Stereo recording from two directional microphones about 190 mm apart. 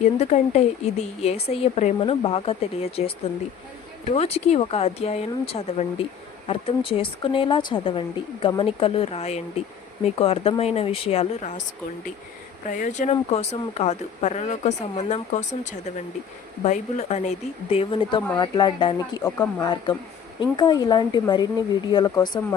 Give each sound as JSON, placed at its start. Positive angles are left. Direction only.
{"t": 0.0, "sound": "speech", "side_deg": 40}
{"t": 4.1, "sound": "a woman's voice", "side_deg": 30}
{"t": 12.6, "sound": "a woman's voice", "side_deg": 40}